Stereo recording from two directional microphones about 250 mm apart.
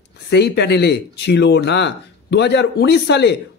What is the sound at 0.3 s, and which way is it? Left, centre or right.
Speech, left.